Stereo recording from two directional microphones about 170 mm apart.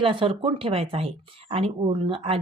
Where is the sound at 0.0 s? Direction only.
30° right (ahead or behind).